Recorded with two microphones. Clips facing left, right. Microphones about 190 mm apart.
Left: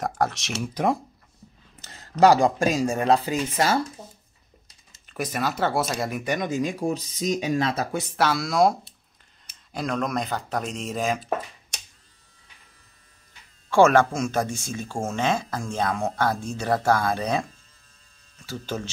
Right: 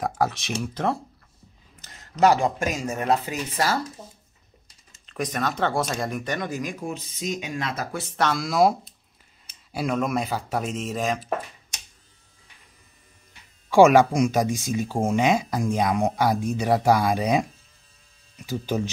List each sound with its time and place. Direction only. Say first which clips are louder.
0.0 s speech: right 1 dB; centre (ahead or behind)
1.8 s speech: left 2 dB; 30° left (ahead or behind)
5.0 s speech: even; 5° left (ahead or behind); by 6.7 s 20° left (ahead or behind)
6.8 s speech: left 5 dB; 40° left (ahead or behind)
8.2 s speech: even; centre (ahead or behind)
13.7 s speech: right 2 dB; 15° right (ahead or behind)